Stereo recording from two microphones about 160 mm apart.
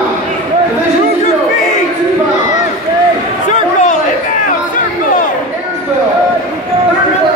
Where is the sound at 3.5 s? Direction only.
50° left (ahead or behind).